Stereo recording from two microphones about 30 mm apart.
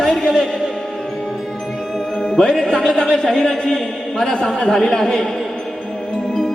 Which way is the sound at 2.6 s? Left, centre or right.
Left.